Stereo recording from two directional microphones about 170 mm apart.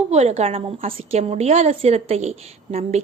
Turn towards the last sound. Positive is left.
turn(degrees=-40)  # may be behind; listen again after turning